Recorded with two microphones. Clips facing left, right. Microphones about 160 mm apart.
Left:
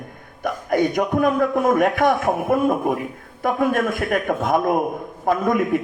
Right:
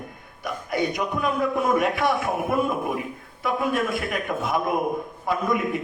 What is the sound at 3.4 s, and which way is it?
A man's voice, 50° left (ahead or behind).